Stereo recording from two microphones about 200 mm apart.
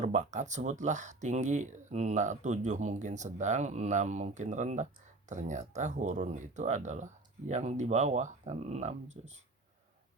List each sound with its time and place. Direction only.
0.0 s speech: 35° right (ahead or behind)